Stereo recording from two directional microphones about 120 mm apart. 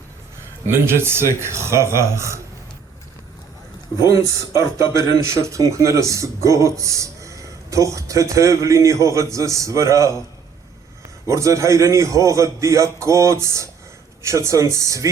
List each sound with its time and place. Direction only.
0.7 s speech: 20° right (ahead or behind)
4.0 s speech: 25° right (ahead or behind)
11.3 s speech: 25° right (ahead or behind)